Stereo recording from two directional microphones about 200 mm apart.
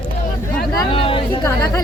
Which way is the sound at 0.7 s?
25° left (ahead or behind).